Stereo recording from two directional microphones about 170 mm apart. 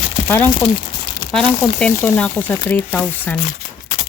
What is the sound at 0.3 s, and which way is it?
Speech, 10° left (ahead or behind).